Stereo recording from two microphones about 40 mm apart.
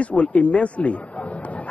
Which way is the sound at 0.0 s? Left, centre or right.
Left.